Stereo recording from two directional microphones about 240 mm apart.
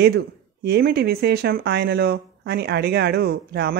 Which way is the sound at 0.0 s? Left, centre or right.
Right.